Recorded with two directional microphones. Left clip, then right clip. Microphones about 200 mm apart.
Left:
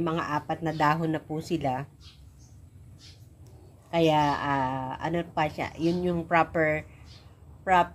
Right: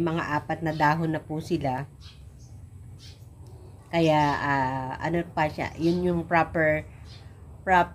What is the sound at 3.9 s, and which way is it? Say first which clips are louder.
A woman's voice: right 1 dB; 15° left (ahead or behind).